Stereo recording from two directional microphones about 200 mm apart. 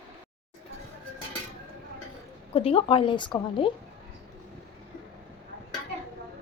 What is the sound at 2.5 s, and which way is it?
A woman's voice, 30° left (ahead or behind).